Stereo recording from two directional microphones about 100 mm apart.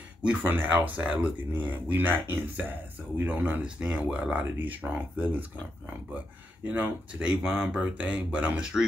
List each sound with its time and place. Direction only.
0.2 s speech: 15° right (ahead or behind)
6.7 s speech: 15° right (ahead or behind)